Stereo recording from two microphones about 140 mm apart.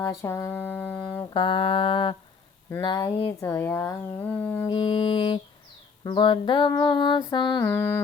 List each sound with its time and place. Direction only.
0.0 s speech: 20° left (ahead or behind)
1.2 s music: 35° left (ahead or behind)
2.8 s speech: 30° left (ahead or behind)
3.2 s speech: 20° left (ahead or behind)
4.7 s music: 35° left (ahead or behind)
7.7 s speech: 15° left (ahead or behind)